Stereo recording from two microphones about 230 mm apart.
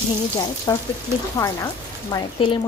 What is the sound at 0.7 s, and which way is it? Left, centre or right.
Speech, centre.